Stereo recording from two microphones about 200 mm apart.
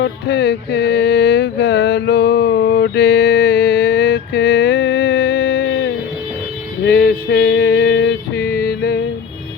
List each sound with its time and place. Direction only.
0.0 s mantra: 55° left (ahead or behind)
6.8 s music: 50° left (ahead or behind)